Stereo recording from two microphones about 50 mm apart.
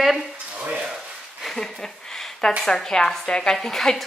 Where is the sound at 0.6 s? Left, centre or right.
Centre.